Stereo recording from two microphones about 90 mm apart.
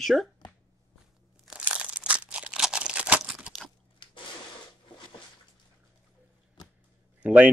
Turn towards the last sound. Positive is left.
turn(degrees=-15)  # may be behind; listen again after turning